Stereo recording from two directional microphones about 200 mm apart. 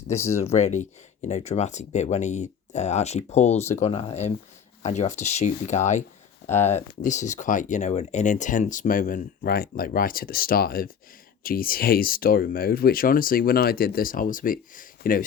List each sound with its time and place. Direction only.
0.1 s speech: 15° left (ahead or behind)
0.4 s speech: 35° left (ahead or behind)